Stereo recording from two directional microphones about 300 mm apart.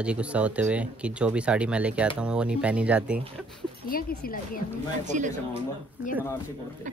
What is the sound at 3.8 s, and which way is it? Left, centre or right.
Speech, left.